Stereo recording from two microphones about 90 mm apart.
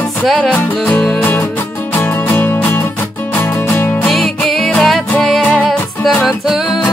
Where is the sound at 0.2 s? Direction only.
Centre (ahead or behind).